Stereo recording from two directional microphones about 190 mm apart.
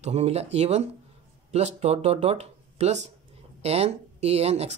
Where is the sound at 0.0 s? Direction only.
35° right (ahead or behind).